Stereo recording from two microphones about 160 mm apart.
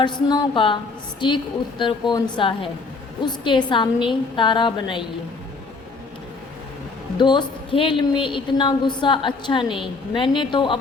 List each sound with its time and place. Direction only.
0.0 s a woman's voice: 30° left (ahead or behind)
7.2 s a woman's voice: 30° left (ahead or behind)